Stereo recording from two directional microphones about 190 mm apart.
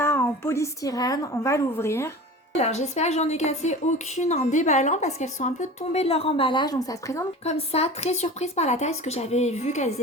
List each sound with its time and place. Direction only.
0.0 s a woman's voice: 10° left (ahead or behind)
2.6 s a woman's voice: 35° left (ahead or behind); by 7.3 s 20° left (ahead or behind)
7.4 s a woman's voice: 35° left (ahead or behind)